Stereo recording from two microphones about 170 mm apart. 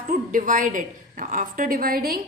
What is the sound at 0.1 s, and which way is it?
A woman's voice, 50° right (ahead or behind).